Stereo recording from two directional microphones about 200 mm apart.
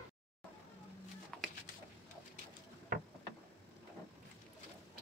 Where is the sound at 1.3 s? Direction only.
5° left (ahead or behind).